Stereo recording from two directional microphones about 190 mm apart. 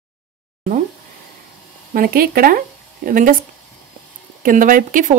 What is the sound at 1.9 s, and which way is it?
Speech, 50° right (ahead or behind).